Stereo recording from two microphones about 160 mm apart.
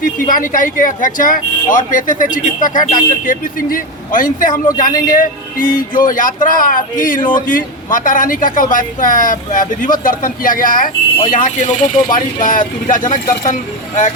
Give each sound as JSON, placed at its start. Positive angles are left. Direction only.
{"t": 0.3, "sound": "speech", "side_deg": 60}